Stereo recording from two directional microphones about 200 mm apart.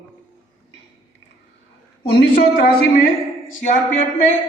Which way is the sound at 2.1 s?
50° left (ahead or behind).